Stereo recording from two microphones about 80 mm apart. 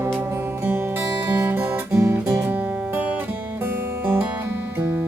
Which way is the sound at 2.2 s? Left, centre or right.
Right.